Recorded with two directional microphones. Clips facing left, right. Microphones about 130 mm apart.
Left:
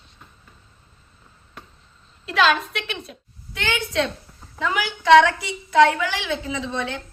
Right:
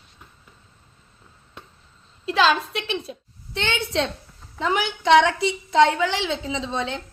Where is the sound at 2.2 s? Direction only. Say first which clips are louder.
Even; 30° right (ahead or behind).